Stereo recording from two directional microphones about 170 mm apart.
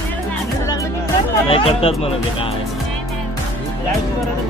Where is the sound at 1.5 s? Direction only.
35° left (ahead or behind).